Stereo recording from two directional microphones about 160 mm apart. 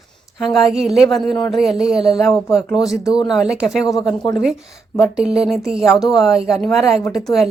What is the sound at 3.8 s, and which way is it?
Speech, 25° left (ahead or behind).